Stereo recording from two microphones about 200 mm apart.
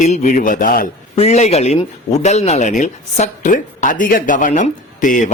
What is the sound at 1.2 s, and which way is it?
Speech, 35° left (ahead or behind).